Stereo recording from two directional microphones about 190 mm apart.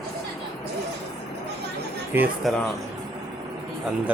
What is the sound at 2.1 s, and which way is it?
Speech, 10° right (ahead or behind).